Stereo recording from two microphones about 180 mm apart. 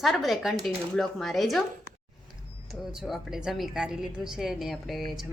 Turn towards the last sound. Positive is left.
turn(degrees=0)  # may be behind; listen again after turning